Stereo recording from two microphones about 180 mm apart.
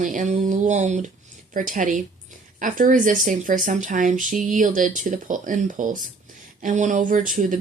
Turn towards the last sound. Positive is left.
turn(degrees=-45)  # may be behind; listen again after turning